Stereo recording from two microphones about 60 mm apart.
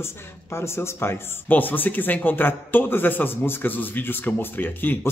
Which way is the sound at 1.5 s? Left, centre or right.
Left.